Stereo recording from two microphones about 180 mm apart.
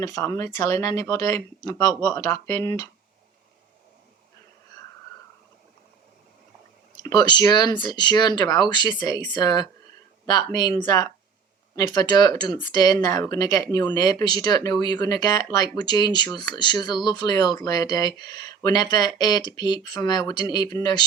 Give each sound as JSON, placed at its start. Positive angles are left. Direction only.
{"t": 0.0, "sound": "speech", "side_deg": 20}
{"t": 7.0, "sound": "speech", "side_deg": 20}